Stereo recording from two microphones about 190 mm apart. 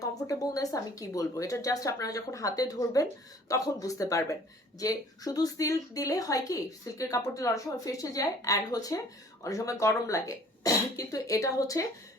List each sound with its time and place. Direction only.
0.0 s a woman's voice: 20° left (ahead or behind)